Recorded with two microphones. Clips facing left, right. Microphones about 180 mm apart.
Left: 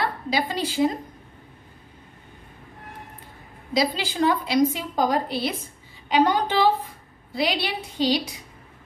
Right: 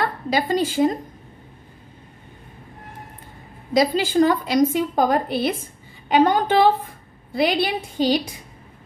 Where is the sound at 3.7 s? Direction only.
50° right (ahead or behind).